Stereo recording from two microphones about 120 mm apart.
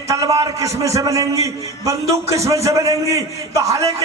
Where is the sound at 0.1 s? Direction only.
30° right (ahead or behind).